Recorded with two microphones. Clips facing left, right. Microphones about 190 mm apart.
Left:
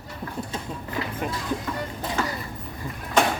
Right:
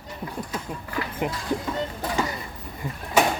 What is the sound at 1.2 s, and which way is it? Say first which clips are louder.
Vehicle: right 4 dB; 15° right (ahead or behind).